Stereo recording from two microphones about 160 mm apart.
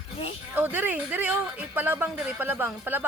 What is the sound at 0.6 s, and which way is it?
A woman's voice, 10° right (ahead or behind).